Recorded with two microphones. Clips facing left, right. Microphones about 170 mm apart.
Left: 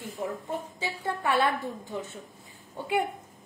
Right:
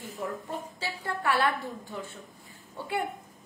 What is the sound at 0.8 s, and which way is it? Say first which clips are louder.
A woman's voice: left 2 dB; 20° left (ahead or behind).